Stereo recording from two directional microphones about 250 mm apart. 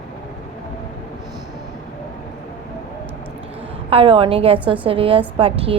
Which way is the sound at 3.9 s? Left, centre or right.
Right.